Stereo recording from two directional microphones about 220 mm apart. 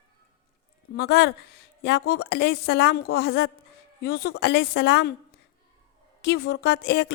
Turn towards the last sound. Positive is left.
turn(degrees=50)  # may be behind; listen again after turning